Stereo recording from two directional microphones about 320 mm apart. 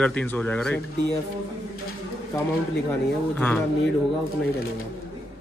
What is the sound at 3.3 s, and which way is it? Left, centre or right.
Speech, centre.